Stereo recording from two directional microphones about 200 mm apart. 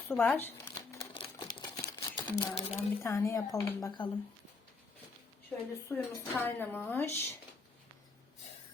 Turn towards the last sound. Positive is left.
turn(degrees=10)  # may be behind; listen again after turning